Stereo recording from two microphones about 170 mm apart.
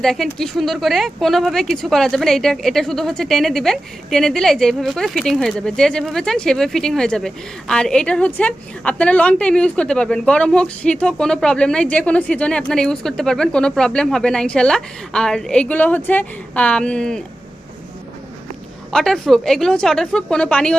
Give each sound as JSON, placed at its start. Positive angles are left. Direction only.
{"t": 0.0, "sound": "speech", "side_deg": 5}
{"t": 18.9, "sound": "speech", "side_deg": 0}